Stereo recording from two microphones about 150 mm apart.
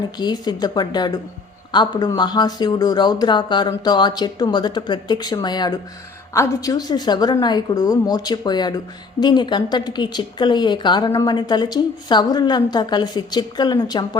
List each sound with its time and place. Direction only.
0.2 s a woman's voice: 30° left (ahead or behind)